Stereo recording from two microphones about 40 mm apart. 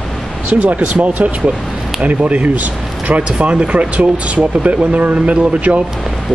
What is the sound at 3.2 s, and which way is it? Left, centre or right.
Speech, right.